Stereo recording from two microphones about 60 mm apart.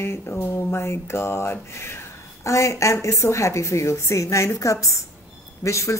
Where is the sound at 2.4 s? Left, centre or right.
Left.